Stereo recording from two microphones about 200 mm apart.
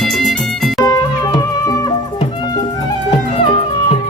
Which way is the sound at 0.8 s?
15° left (ahead or behind).